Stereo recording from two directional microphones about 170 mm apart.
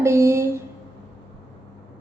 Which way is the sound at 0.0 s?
15° right (ahead or behind).